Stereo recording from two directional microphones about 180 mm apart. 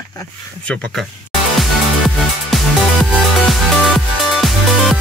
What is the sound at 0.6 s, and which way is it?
Speech, 5° left (ahead or behind).